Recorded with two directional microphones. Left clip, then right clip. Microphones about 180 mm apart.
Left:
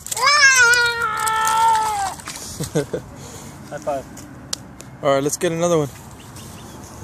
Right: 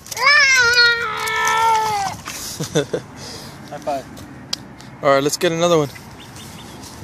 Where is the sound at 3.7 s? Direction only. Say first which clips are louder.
Right 1 dB; 30° left (ahead or behind).